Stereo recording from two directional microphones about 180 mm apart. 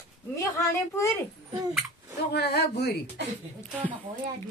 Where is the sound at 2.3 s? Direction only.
65° left (ahead or behind).